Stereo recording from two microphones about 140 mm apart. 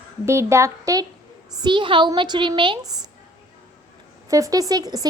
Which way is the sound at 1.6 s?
35° right (ahead or behind).